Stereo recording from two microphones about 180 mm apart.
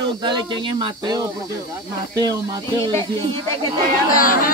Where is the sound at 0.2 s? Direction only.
25° right (ahead or behind).